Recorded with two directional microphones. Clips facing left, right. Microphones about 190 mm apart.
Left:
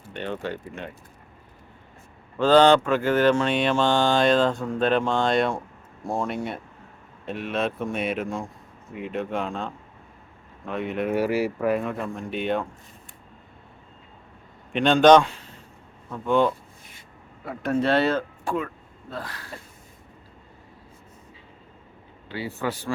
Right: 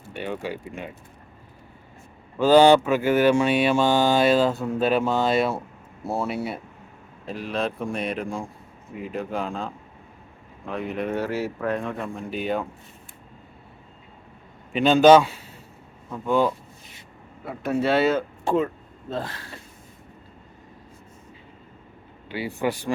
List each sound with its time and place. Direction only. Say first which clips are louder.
0.1 s mantra: even; 10° right (ahead or behind)
2.4 s mantra: right 2 dB; 10° right (ahead or behind)
6.1 s speech: right 1 dB; 5° right (ahead or behind)
14.7 s a man's voice: right 1 dB; 5° right (ahead or behind)
18.4 s speech: right 5 dB; 25° right (ahead or behind)
22.3 s mantra: right 3 dB; 15° right (ahead or behind)